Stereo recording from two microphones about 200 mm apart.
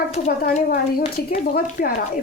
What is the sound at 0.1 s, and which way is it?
A woman's voice, 40° left (ahead or behind).